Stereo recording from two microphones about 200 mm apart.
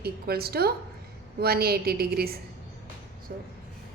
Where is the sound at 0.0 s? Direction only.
50° right (ahead or behind).